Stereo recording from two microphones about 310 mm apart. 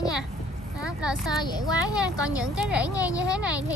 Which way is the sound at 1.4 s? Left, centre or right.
Centre.